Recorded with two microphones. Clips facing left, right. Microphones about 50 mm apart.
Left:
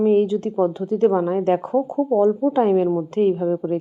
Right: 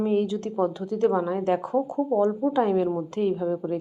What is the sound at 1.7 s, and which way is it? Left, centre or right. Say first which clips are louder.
A woman's voice: left 5 dB; left.